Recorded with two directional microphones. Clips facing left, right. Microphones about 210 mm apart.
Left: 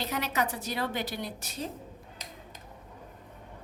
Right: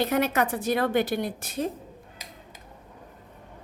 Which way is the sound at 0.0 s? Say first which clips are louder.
Right 7 dB; 55° right (ahead or behind).